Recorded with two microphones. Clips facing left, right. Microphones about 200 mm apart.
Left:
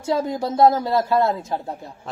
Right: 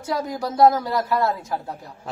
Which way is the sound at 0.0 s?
25° left (ahead or behind).